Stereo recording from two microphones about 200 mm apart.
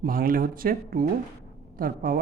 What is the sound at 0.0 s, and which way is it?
Speech, 45° right (ahead or behind).